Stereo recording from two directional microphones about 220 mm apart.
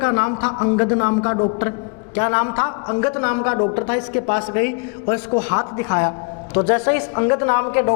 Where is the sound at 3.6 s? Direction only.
25° left (ahead or behind).